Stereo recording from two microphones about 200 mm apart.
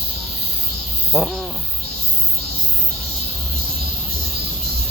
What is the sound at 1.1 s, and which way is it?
Speech, centre (ahead or behind).